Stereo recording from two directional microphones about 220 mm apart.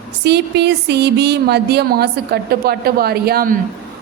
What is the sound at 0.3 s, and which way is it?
Speech, 50° right (ahead or behind).